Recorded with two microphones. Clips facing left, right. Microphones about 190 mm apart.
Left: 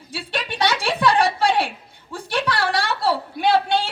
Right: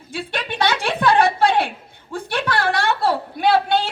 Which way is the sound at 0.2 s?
55° right (ahead or behind).